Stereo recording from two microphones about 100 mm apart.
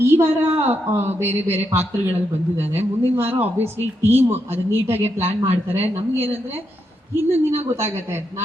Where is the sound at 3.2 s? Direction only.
20° right (ahead or behind).